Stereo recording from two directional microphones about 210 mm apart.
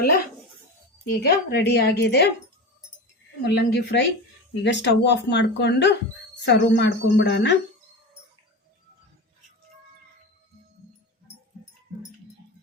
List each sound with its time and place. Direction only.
1.0 s a woman's voice: 50° left (ahead or behind)
3.4 s a woman's voice: 50° left (ahead or behind)